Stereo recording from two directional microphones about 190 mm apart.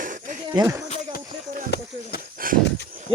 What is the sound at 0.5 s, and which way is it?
Speech, 15° right (ahead or behind).